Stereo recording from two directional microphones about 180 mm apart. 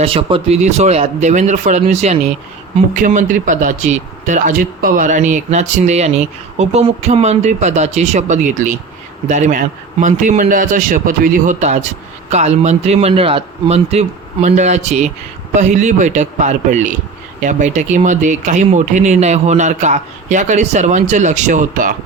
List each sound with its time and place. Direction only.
0.0 s speech: 30° right (ahead or behind); by 21.9 s 45° right (ahead or behind)